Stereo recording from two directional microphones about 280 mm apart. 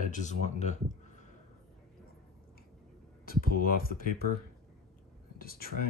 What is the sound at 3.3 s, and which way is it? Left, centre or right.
Speech, left.